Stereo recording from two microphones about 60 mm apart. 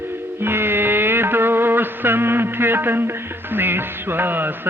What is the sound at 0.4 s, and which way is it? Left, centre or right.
Music, right.